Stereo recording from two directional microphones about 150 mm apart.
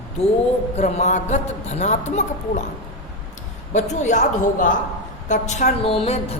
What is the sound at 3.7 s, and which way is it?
A woman's voice, 50° left (ahead or behind).